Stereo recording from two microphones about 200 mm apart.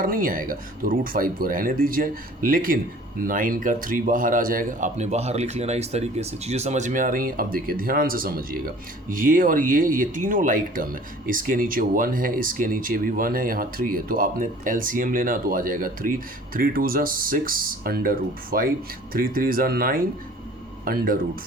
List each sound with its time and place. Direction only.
0.0 s speech: 45° right (ahead or behind)